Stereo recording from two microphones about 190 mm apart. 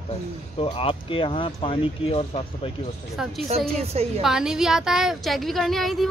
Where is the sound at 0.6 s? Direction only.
30° left (ahead or behind).